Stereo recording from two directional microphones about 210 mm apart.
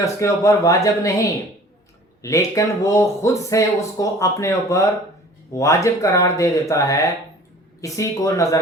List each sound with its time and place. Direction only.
0.0 s speech: 15° left (ahead or behind)